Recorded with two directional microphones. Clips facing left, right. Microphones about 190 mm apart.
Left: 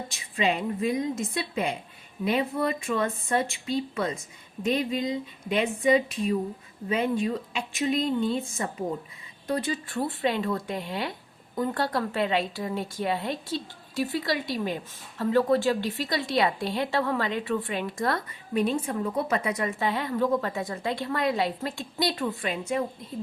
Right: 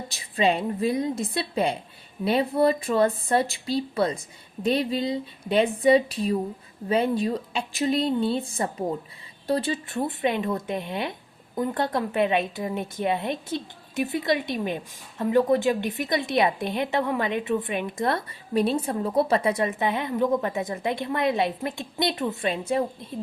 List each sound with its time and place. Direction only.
0.1 s a woman's voice: 35° right (ahead or behind)